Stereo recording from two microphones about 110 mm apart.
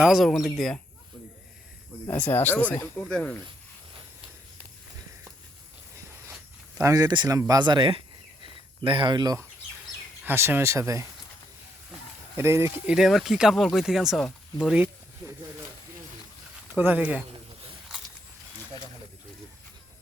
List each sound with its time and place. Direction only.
0.0 s speech: centre (ahead or behind)
2.2 s speech: 15° left (ahead or behind)
6.8 s speech: 35° right (ahead or behind)
10.2 s speech: 20° right (ahead or behind)
12.4 s speech: 25° right (ahead or behind)
13.0 s speech: centre (ahead or behind)
16.7 s speech: 15° right (ahead or behind)